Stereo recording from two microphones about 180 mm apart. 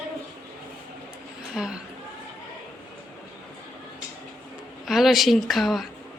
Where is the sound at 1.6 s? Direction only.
5° right (ahead or behind).